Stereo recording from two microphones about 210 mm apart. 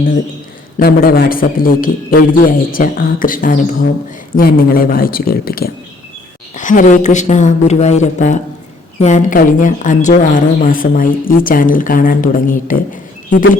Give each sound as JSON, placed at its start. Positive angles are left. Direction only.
{"t": 0.8, "sound": "a man's voice", "side_deg": 45}